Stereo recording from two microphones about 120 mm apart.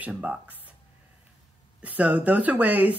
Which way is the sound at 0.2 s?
15° right (ahead or behind).